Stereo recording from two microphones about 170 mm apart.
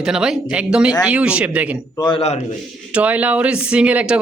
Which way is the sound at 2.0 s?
30° left (ahead or behind).